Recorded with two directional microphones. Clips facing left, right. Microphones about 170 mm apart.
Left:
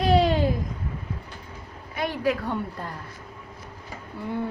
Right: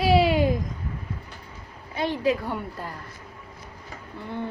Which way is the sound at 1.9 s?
25° right (ahead or behind).